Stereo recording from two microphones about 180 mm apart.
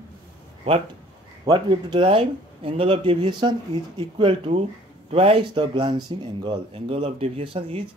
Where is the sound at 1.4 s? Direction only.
25° right (ahead or behind).